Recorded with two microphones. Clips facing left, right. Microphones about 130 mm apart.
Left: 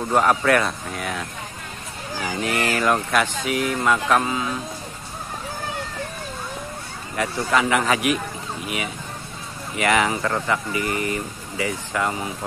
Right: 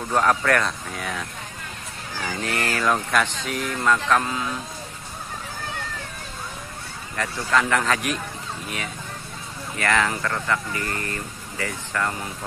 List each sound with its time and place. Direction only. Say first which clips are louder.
0.1 s speech: left 2 dB; 10° left (ahead or behind)
7.2 s speech: left 2 dB; 10° left (ahead or behind)